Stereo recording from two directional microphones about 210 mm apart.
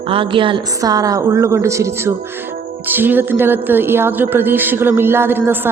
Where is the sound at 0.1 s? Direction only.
25° right (ahead or behind).